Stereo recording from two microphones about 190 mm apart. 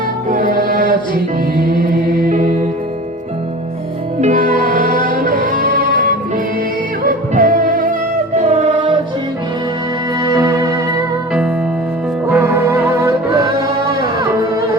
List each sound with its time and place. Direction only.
0.3 s music: 45° right (ahead or behind)
4.2 s music: 45° right (ahead or behind)
10.2 s music: 20° right (ahead or behind)
12.3 s music: 15° right (ahead or behind)